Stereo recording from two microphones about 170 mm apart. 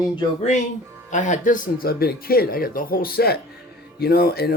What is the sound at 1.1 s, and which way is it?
Speech, 45° left (ahead or behind).